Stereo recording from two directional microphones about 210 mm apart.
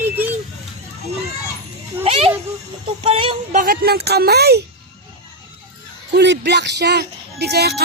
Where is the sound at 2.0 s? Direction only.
30° right (ahead or behind).